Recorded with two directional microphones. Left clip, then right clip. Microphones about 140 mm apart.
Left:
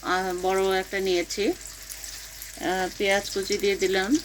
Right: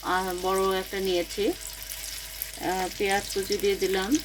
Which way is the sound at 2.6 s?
20° left (ahead or behind).